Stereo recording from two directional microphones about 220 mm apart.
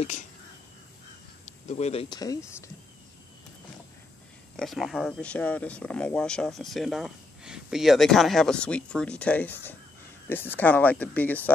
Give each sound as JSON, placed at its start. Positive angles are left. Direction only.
{"t": 1.4, "sound": "speech", "side_deg": 30}
{"t": 4.6, "sound": "speech", "side_deg": 0}